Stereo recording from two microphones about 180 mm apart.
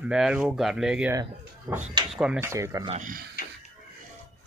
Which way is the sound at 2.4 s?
15° right (ahead or behind).